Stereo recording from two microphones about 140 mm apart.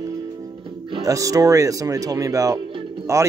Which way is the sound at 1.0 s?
25° right (ahead or behind).